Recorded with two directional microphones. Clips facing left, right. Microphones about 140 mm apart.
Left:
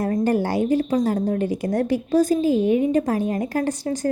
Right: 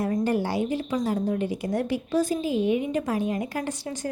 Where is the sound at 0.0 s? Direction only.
45° left (ahead or behind).